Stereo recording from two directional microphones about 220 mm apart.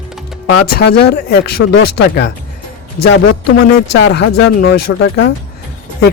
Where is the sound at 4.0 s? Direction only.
50° left (ahead or behind).